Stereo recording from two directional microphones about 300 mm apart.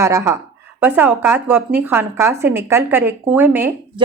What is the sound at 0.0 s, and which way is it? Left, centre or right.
A woman's voice, centre.